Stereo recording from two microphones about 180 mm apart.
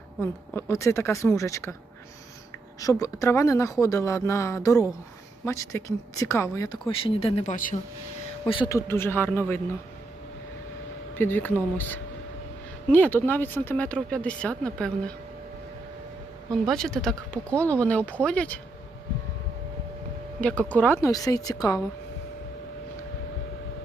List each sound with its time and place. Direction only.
0.2 s speech: 15° left (ahead or behind)
3.0 s speech: 15° left (ahead or behind)
6.8 s speech: 30° left (ahead or behind)
7.5 s speech: 45° left (ahead or behind)
8.7 s speech: 15° left (ahead or behind)
11.1 s speech: 10° left (ahead or behind)
16.5 s speech: 5° left (ahead or behind)
20.4 s speech: 5° left (ahead or behind)